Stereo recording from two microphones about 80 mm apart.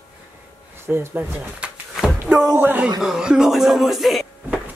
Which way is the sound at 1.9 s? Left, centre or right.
Centre.